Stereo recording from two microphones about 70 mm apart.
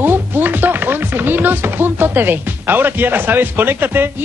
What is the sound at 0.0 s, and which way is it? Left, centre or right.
Chopping, right.